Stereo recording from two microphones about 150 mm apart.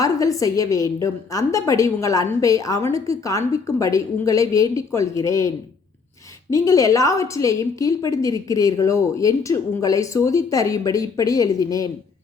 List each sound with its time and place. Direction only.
0.0 s a woman's voice: 20° left (ahead or behind)